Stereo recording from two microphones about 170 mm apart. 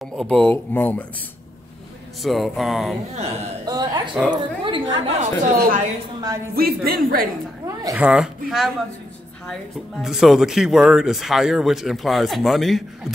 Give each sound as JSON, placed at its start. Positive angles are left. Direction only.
{"t": 0.2, "sound": "speech", "side_deg": 5}
{"t": 2.2, "sound": "speech", "side_deg": 0}
{"t": 3.6, "sound": "a sound", "side_deg": -25}
{"t": 4.3, "sound": "a woman's voice", "side_deg": -30}
{"t": 5.2, "sound": "speech", "side_deg": -50}
{"t": 7.9, "sound": "speech", "side_deg": -5}
{"t": 10.0, "sound": "speech", "side_deg": 0}